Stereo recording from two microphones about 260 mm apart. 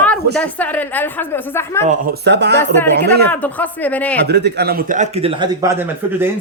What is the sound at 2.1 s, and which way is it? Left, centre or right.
Speech, right.